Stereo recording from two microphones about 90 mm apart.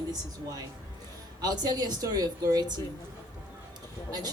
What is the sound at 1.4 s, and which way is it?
Speech, 45° right (ahead or behind).